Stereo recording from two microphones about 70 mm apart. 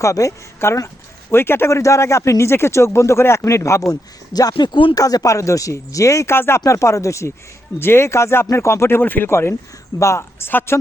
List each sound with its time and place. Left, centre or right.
0.0 s a man's voice: left
6.3 s speech: left
6.7 s a man's voice: left
9.0 s speech: left